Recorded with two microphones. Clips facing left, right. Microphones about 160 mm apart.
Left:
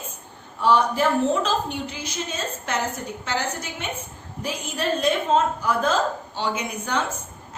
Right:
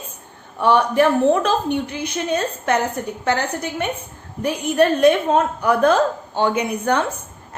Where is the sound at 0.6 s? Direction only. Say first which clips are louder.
Right 4 dB; 60° right (ahead or behind).